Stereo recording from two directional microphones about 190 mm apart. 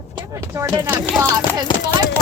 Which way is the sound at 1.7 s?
25° left (ahead or behind).